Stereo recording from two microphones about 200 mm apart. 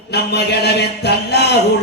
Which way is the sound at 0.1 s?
55° left (ahead or behind).